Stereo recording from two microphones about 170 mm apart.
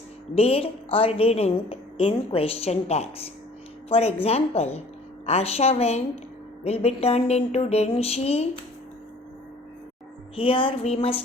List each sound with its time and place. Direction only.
0.3 s a woman's voice: 35° left (ahead or behind)
10.3 s a woman's voice: 30° left (ahead or behind)